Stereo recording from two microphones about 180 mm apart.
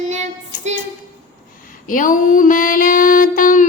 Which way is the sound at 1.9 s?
50° left (ahead or behind).